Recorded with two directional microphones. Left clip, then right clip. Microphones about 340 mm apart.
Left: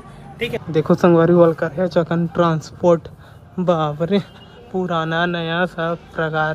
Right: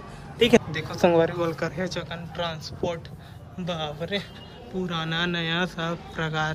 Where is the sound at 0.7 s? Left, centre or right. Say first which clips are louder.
Left 7 dB; centre.